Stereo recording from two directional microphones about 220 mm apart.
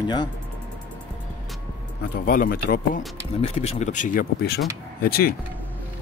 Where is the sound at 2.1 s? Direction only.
40° left (ahead or behind).